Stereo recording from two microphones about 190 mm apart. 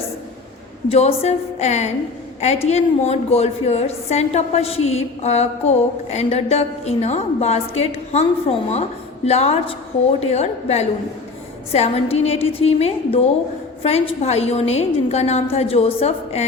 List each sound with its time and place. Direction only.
0.9 s a woman's voice: 35° left (ahead or behind)